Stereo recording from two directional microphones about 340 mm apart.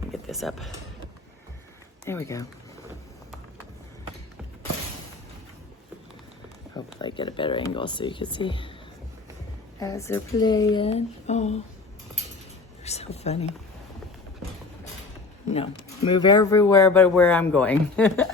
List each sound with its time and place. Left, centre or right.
0.1 s a sound: centre
2.0 s speech: centre
6.7 s speech: centre
9.8 s speech: centre
10.8 s a sound: centre
12.8 s a woman's voice: centre
15.4 s speech: centre